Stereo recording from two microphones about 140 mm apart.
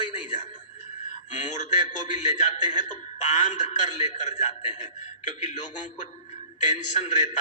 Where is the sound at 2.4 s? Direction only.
55° left (ahead or behind).